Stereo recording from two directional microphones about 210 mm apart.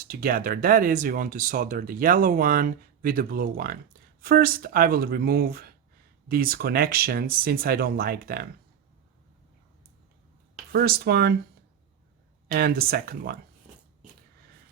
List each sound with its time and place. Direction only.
0.0 s speech: 45° right (ahead or behind)
10.7 s speech: 45° right (ahead or behind)
12.5 s speech: 45° right (ahead or behind)